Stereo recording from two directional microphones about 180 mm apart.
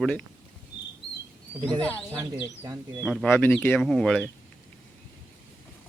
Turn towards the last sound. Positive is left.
turn(degrees=5)  # may be behind; listen again after turning